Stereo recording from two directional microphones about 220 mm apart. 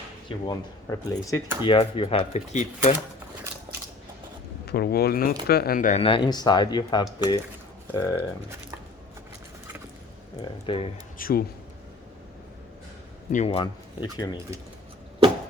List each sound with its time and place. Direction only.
0.3 s speech: 20° left (ahead or behind)
4.6 s speech: 45° left (ahead or behind)
6.0 s speech: 25° left (ahead or behind)
10.4 s speech: 25° left (ahead or behind)
11.2 s speech: 40° left (ahead or behind)
13.3 s speech: 30° left (ahead or behind)